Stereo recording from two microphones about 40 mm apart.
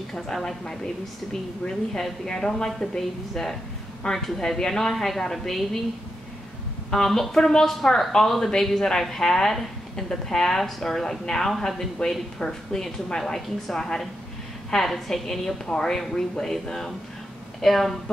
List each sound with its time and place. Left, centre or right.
0.1 s a woman's voice: centre
2.2 s a woman's voice: centre
6.9 s a woman's voice: centre